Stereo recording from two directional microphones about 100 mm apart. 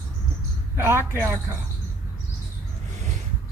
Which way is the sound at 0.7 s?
25° right (ahead or behind).